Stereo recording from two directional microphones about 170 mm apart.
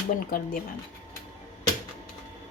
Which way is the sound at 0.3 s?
60° left (ahead or behind).